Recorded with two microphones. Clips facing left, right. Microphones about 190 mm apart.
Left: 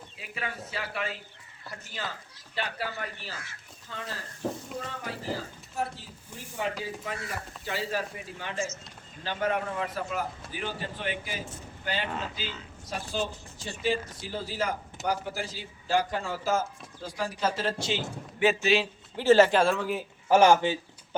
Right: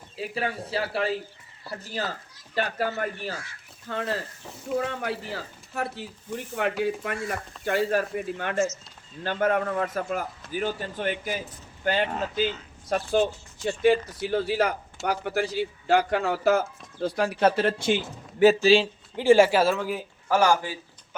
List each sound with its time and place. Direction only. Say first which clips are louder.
0.2 s speech: right 8 dB; 30° right (ahead or behind)
2.6 s a man's voice: right 7 dB; 45° right (ahead or behind)
3.8 s speech: right 10 dB; 60° right (ahead or behind)
4.4 s speech: left 11 dB; 45° left (ahead or behind)
4.8 s a man's voice: right 8 dB; 70° right (ahead or behind); by 18.9 s 30° right (ahead or behind)
19.1 s speech: right 2 dB; 15° right (ahead or behind)
20.2 s speech: left 2 dB; 20° left (ahead or behind)